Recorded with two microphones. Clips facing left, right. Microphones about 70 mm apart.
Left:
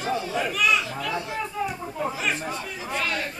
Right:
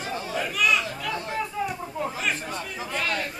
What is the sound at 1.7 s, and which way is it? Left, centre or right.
Chatter, centre.